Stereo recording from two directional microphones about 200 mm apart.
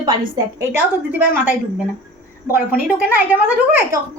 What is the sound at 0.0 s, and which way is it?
Speech, 20° right (ahead or behind).